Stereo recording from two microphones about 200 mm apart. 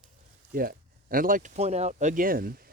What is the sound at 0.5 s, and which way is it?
Speech, 45° right (ahead or behind).